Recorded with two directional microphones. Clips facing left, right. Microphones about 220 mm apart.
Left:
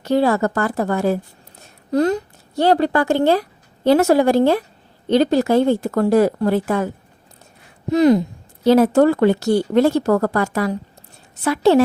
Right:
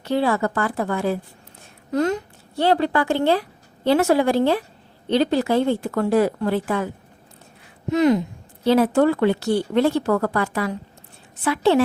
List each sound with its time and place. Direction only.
0.0 s a woman's voice: 40° left (ahead or behind)